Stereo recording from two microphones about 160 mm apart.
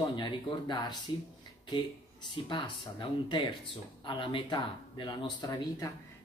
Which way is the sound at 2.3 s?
30° left (ahead or behind).